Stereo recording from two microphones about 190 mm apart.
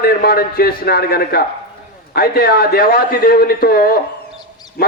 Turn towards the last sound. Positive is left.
turn(degrees=50)  # may be behind; listen again after turning